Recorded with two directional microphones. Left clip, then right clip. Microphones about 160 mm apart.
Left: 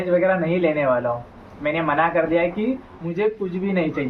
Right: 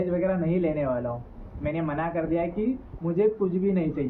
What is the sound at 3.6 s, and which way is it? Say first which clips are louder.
Speech: left 4 dB; 25° left (ahead or behind).